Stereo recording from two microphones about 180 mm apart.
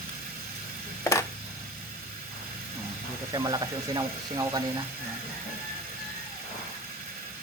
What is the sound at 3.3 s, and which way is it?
Speech, 20° right (ahead or behind).